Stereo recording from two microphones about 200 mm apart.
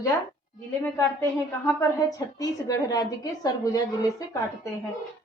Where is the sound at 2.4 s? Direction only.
20° left (ahead or behind).